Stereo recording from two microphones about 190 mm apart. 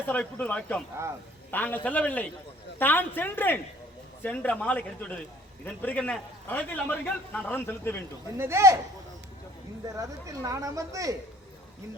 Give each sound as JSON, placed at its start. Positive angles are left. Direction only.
{"t": 0.1, "sound": "a man's voice", "side_deg": 10}
{"t": 8.4, "sound": "speech", "side_deg": -15}
{"t": 9.9, "sound": "speech", "side_deg": -15}